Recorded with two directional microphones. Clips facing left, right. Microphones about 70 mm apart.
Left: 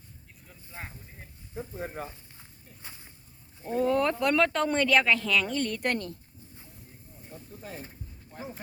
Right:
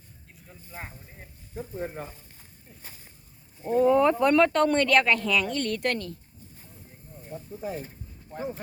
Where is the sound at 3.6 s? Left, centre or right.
Centre.